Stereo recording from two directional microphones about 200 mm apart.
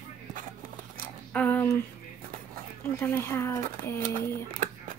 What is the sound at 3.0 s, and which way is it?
Speech, 15° left (ahead or behind).